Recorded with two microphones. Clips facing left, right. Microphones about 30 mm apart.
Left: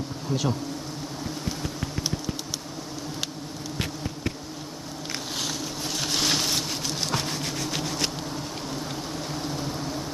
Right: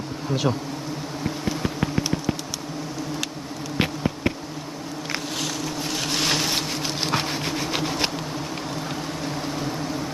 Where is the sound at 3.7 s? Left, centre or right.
Right.